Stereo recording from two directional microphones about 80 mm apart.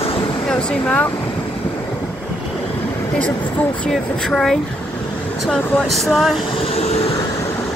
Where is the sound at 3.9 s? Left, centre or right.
Centre.